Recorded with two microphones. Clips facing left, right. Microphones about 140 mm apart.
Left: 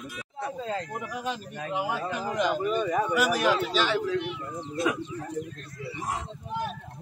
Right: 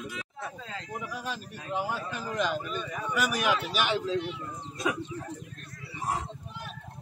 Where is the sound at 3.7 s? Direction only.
20° right (ahead or behind).